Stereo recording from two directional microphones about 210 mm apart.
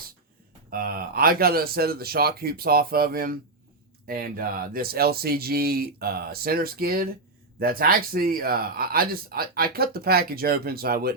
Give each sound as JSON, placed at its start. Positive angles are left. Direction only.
{"t": 0.7, "sound": "speech", "side_deg": -45}